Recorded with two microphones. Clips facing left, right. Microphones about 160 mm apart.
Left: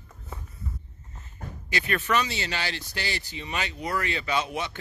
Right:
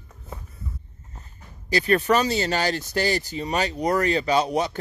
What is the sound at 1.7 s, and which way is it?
Speech, 35° right (ahead or behind).